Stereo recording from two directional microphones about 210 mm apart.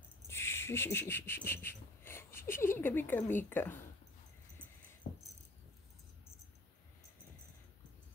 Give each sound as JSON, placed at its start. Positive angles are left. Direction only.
{"t": 0.3, "sound": "a sound", "side_deg": 10}
{"t": 3.4, "sound": "speech", "side_deg": 10}
{"t": 5.1, "sound": "rattle", "side_deg": 40}